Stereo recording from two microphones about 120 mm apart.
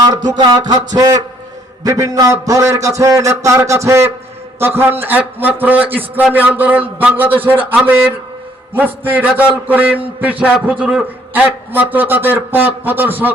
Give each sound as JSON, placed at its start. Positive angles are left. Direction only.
{"t": 0.0, "sound": "music", "side_deg": -35}
{"t": 0.3, "sound": "a sound", "side_deg": -35}
{"t": 1.8, "sound": "a man's voice", "side_deg": -30}